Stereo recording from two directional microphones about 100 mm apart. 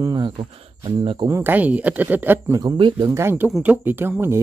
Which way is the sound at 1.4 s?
15° right (ahead or behind).